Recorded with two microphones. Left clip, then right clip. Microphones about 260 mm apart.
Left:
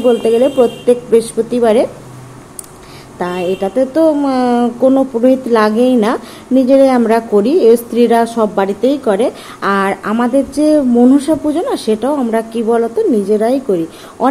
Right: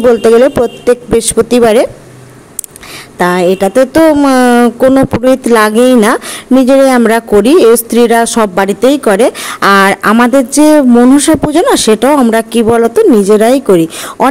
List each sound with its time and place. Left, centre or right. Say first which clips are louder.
0.1 s speech: right 6 dB; right
3.2 s speech: right 8 dB; right